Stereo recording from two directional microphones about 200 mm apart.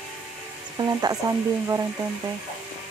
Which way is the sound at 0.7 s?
20° right (ahead or behind).